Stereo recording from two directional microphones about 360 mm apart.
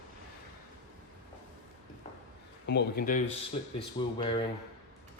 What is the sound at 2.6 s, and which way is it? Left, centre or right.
Speech, left.